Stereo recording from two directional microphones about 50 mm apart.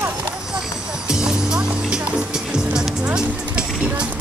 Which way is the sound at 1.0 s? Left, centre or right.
Centre.